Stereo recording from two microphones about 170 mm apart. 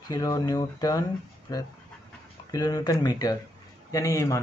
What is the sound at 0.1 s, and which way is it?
Speech, 20° left (ahead or behind).